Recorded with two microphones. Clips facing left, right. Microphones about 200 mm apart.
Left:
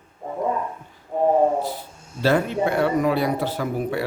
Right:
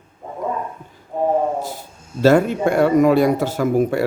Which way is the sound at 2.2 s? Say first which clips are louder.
Right 6 dB; 45° right (ahead or behind).